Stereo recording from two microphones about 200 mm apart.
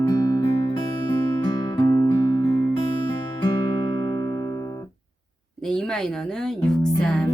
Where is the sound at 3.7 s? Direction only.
20° left (ahead or behind).